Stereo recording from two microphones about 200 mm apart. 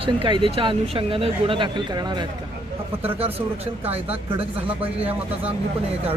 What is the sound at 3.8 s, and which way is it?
Speech, 10° right (ahead or behind).